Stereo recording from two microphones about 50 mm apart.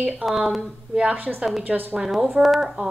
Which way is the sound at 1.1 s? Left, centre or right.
Right.